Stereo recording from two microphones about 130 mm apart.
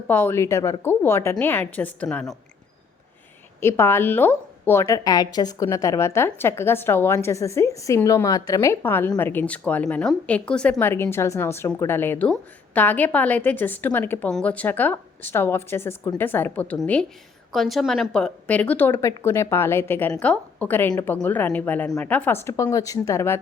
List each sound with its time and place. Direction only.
0.1 s a woman's voice: 15° left (ahead or behind)
3.6 s a woman's voice: 20° left (ahead or behind)